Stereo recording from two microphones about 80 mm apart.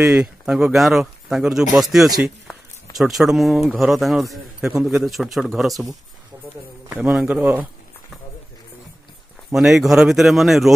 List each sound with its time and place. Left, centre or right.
0.0 s speech: centre
6.3 s a sound: right
6.9 s a man's voice: centre
9.5 s speech: centre